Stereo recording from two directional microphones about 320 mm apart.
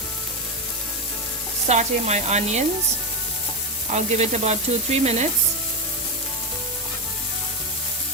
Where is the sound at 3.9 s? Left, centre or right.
Right.